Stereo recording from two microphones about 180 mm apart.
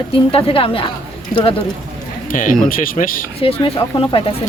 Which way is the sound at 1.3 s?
55° left (ahead or behind).